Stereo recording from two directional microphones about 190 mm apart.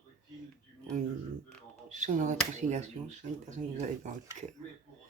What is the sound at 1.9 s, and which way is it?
Speech, 40° right (ahead or behind).